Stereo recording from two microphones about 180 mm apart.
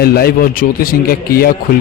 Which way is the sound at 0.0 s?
60° left (ahead or behind).